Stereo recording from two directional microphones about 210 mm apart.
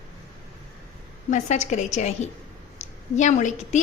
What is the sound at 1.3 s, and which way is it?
A woman's voice, 35° left (ahead or behind).